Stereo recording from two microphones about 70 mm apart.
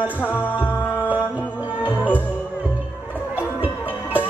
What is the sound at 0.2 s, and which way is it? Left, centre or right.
Music, left.